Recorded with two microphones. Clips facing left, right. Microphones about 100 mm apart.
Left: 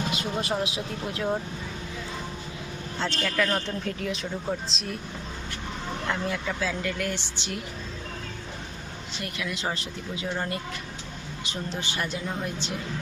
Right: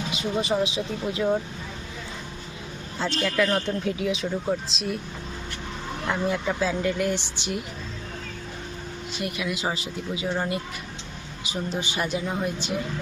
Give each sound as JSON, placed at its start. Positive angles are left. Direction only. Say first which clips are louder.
{"t": 0.2, "sound": "a man's voice", "louder": "right 4 dB", "side_deg": 0}
{"t": 3.0, "sound": "a man's voice", "louder": "right 3 dB", "side_deg": -5}
{"t": 6.1, "sound": "speech", "louder": "right 5 dB", "side_deg": -20}
{"t": 9.1, "sound": "speech", "louder": "right 4 dB", "side_deg": -15}